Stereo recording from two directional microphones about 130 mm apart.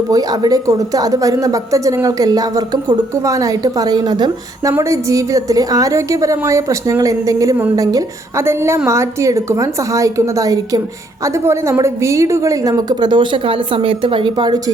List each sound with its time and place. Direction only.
0.1 s a woman's voice: 30° right (ahead or behind)